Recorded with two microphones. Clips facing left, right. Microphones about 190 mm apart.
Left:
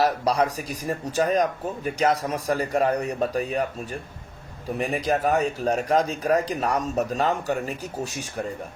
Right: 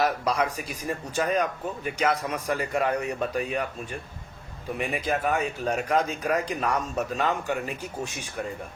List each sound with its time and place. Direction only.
0.0 s speech: 35° left (ahead or behind)
4.8 s speech: 40° left (ahead or behind)